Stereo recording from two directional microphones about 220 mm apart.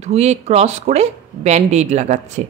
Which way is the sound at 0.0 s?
30° right (ahead or behind).